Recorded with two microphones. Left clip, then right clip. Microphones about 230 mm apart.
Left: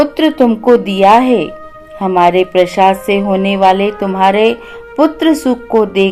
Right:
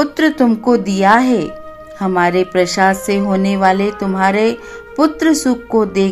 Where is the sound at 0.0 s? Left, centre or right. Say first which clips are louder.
Left 3 dB; right.